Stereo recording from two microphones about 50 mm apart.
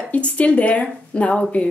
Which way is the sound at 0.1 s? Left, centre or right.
Left.